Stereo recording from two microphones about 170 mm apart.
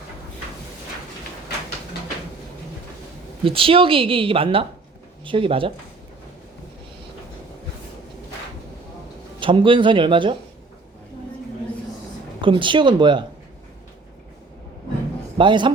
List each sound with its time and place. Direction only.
3.4 s a woman's voice: 30° right (ahead or behind)
9.4 s speech: 30° right (ahead or behind)
12.4 s speech: 30° right (ahead or behind)
15.4 s speech: 30° right (ahead or behind)